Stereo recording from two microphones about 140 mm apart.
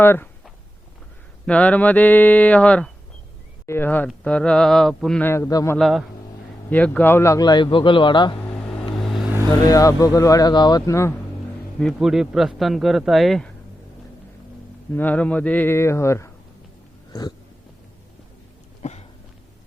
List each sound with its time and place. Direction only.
0.0 s speech: 15° left (ahead or behind)
1.5 s speech: 10° left (ahead or behind)
5.2 s speech: 20° left (ahead or behind)
5.7 s a man's voice: centre (ahead or behind)
6.7 s a man's voice: 10° left (ahead or behind); by 8.4 s 35° left (ahead or behind)
8.6 s vehicle: centre (ahead or behind)
9.6 s speech: 25° left (ahead or behind)
11.8 s a man's voice: centre (ahead or behind)
14.9 s speech: 10° left (ahead or behind)
17.1 s a sound: 30° left (ahead or behind)
18.8 s a sound: 50° left (ahead or behind)